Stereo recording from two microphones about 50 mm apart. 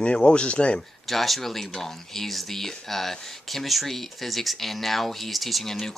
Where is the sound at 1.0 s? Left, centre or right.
Centre.